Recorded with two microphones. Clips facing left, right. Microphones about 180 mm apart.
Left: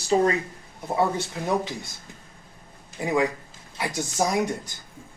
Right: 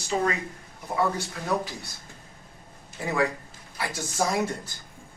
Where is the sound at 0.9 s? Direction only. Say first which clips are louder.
Left 2 dB; 25° left (ahead or behind).